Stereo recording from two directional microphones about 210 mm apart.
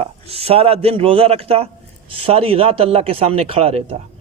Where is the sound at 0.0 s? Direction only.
30° right (ahead or behind).